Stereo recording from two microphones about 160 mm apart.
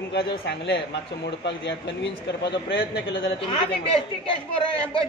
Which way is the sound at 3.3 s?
35° left (ahead or behind).